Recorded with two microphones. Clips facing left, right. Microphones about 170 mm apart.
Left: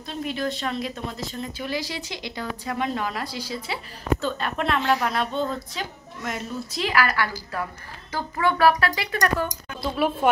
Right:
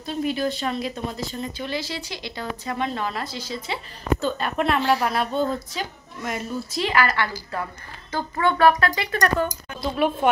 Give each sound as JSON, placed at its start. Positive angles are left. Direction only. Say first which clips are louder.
{"t": 0.0, "sound": "a woman's voice", "louder": "right 4 dB", "side_deg": -5}
{"t": 1.7, "sound": "a woman's voice", "louder": "even", "side_deg": 15}